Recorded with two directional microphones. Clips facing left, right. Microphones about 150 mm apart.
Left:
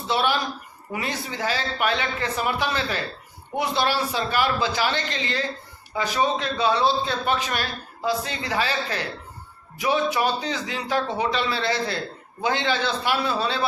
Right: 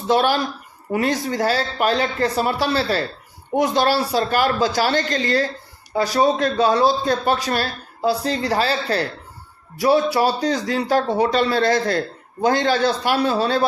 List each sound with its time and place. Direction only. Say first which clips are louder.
0.1 s a man's voice: right 6 dB; 45° right (ahead or behind)